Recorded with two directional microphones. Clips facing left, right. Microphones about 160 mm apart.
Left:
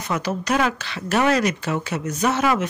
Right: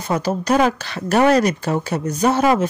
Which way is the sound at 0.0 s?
30° right (ahead or behind).